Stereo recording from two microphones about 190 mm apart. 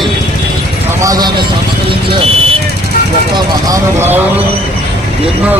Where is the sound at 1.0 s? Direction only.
20° right (ahead or behind).